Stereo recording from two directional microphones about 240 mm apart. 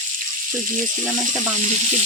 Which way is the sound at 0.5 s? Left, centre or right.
Right.